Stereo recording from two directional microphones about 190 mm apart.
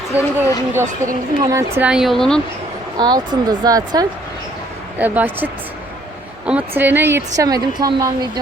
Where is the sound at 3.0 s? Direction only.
20° right (ahead or behind).